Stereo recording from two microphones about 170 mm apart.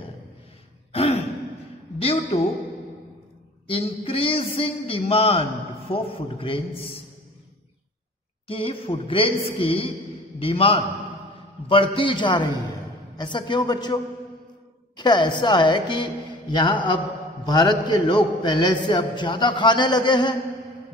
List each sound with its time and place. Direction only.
0.9 s sigh: 35° left (ahead or behind)
2.0 s a sound: 35° left (ahead or behind)
3.6 s a man's voice: 35° left (ahead or behind)
8.5 s a man's voice: 30° left (ahead or behind)
15.0 s a man's voice: 25° left (ahead or behind)